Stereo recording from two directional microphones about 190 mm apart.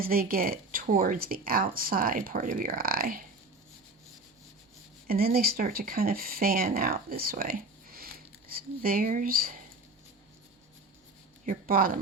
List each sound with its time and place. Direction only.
0.0 s speech: 50° right (ahead or behind)
5.0 s speech: 50° right (ahead or behind)
11.4 s speech: 50° right (ahead or behind)